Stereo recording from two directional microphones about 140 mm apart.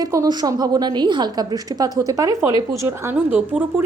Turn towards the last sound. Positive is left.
turn(degrees=-15)  # may be behind; listen again after turning